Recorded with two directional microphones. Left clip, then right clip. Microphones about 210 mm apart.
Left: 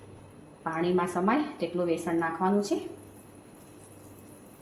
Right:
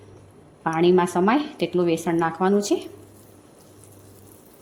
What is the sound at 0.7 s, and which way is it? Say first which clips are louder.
Speech: right 9 dB; 55° right (ahead or behind).